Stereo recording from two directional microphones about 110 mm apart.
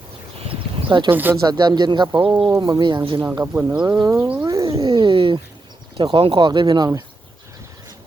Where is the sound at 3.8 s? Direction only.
35° right (ahead or behind).